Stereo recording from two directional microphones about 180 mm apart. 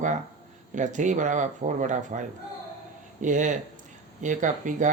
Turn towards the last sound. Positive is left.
turn(degrees=-45)  # may be behind; listen again after turning